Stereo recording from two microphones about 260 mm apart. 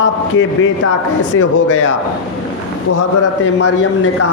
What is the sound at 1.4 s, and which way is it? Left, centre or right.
Speech, left.